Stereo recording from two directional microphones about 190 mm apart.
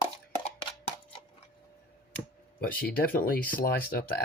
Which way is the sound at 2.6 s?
50° left (ahead or behind).